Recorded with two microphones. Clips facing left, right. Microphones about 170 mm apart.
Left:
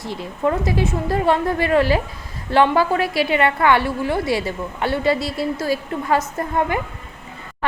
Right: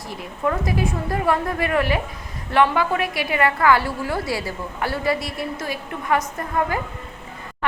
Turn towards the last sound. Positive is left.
turn(degrees=25)  # may be behind; listen again after turning